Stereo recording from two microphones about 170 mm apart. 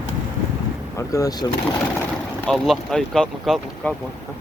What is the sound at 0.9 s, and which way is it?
Speech, 20° left (ahead or behind).